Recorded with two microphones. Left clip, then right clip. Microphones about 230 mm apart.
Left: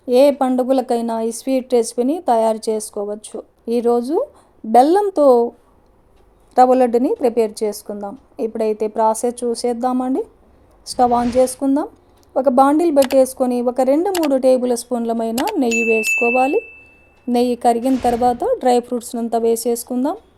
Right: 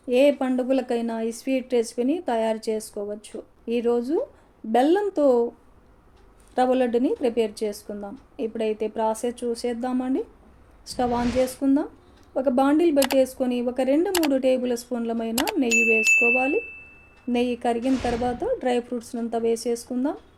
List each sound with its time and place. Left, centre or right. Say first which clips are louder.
0.1 s speech: left 7 dB; left
6.5 s a woman's voice: left 9 dB; left
11.1 s a woman's voice: left 8 dB; centre
11.6 s a woman's voice: left 4 dB; left
14.1 s a woman's voice: left 5 dB; centre
14.3 s speech: left 8 dB; left
17.7 s a woman's voice: left 8 dB; centre
18.3 s speech: left 10 dB; left